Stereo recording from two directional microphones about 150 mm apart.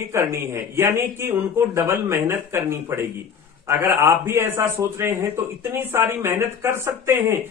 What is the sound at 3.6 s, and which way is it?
A man's voice, 15° right (ahead or behind).